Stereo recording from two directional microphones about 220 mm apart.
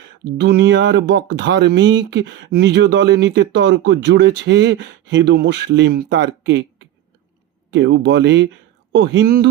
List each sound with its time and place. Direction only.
0.3 s speech: 50° right (ahead or behind)